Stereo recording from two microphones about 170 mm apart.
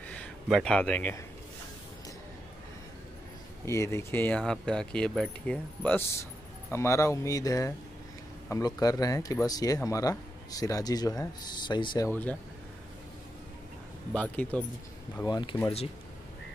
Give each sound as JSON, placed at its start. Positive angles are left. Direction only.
{"t": 0.1, "sound": "speech", "side_deg": 5}
{"t": 3.6, "sound": "speech", "side_deg": 15}
{"t": 12.1, "sound": "speech", "side_deg": 10}
{"t": 14.1, "sound": "speech", "side_deg": 10}
{"t": 15.2, "sound": "speech", "side_deg": 25}